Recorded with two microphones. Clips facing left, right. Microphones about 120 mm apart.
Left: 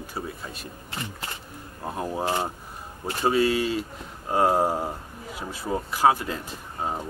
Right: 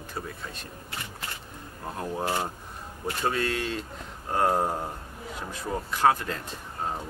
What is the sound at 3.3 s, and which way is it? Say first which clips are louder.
Speech: left 8 dB; 5° left (ahead or behind).